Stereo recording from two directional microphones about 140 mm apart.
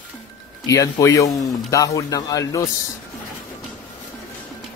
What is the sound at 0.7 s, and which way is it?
Speech, 25° left (ahead or behind).